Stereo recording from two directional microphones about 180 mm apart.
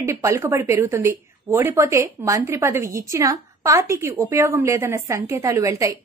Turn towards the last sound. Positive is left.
turn(degrees=-15)  # may be behind; listen again after turning